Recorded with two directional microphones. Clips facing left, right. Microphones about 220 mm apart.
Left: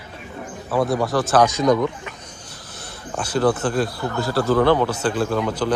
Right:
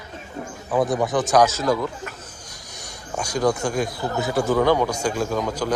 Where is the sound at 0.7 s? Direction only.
15° right (ahead or behind).